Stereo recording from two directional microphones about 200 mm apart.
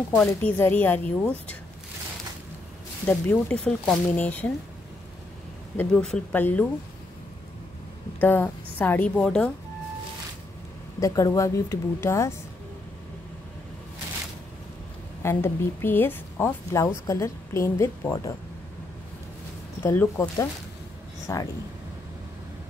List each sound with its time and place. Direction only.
0.1 s a woman's voice: 5° left (ahead or behind)
3.1 s a woman's voice: 10° left (ahead or behind)
5.8 s speech: 5° left (ahead or behind)
8.2 s a woman's voice: 10° left (ahead or behind)
11.0 s a woman's voice: 15° left (ahead or behind)
15.2 s a woman's voice: 10° left (ahead or behind)
19.8 s a woman's voice: 10° left (ahead or behind)